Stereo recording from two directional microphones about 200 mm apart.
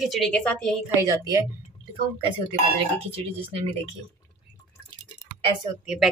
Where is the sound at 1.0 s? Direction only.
15° right (ahead or behind).